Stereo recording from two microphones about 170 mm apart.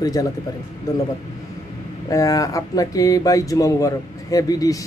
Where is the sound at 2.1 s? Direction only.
20° left (ahead or behind).